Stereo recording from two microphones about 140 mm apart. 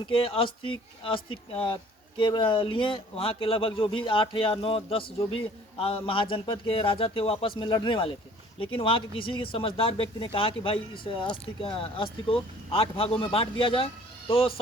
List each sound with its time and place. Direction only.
0.1 s speech: 40° left (ahead or behind)